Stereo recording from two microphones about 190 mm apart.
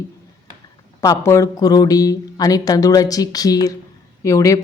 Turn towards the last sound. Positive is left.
turn(degrees=15)  # may be behind; listen again after turning